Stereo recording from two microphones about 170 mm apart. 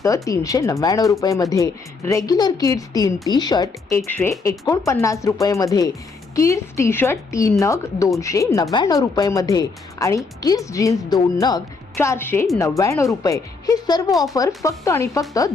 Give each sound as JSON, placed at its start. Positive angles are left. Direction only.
{"t": 0.0, "sound": "a woman's voice", "side_deg": 20}